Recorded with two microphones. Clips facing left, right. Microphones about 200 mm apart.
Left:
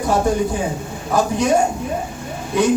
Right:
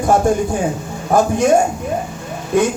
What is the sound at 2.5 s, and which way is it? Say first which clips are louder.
Speech: right 2 dB; 50° right (ahead or behind).